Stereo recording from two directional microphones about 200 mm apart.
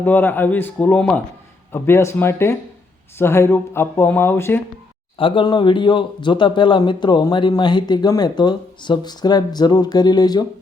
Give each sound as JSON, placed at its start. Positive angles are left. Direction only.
{"t": 0.0, "sound": "speech", "side_deg": 10}
{"t": 5.1, "sound": "speech", "side_deg": 25}